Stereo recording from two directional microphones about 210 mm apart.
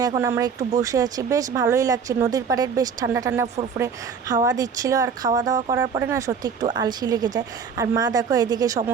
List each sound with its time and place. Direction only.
0.0 s speech: 15° right (ahead or behind)